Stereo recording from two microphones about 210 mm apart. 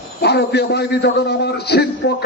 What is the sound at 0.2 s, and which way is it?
A man's voice, 50° left (ahead or behind).